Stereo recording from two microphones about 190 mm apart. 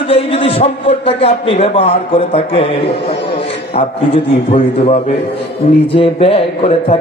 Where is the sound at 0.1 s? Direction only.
30° left (ahead or behind).